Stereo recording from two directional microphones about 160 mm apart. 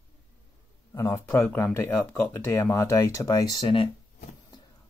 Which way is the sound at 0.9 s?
20° left (ahead or behind).